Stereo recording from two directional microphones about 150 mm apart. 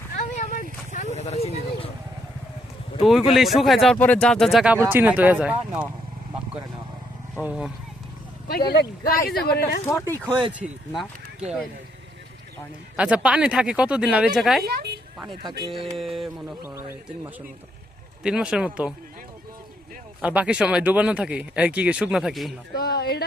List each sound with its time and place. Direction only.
0.2 s a sound: 60° left (ahead or behind)
0.9 s vehicle: 50° left (ahead or behind)
3.0 s speech: centre (ahead or behind)
7.4 s speech: 5° right (ahead or behind)
8.4 s speech: 90° left
10.6 s speech: 5° right (ahead or behind)
13.0 s speech: 10° right (ahead or behind)
14.6 s a woman's voice: 90° right
15.4 s speech: 30° right (ahead or behind)
16.0 s speech: centre (ahead or behind)
16.6 s speech: 15° right (ahead or behind)
20.2 s speech: 10° right (ahead or behind)
22.7 s speech: 90° left